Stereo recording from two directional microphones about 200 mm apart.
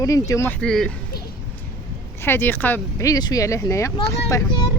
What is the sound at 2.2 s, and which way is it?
Speech, 10° left (ahead or behind).